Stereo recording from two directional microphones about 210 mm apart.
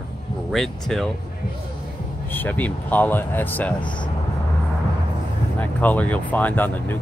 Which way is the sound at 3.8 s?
20° left (ahead or behind).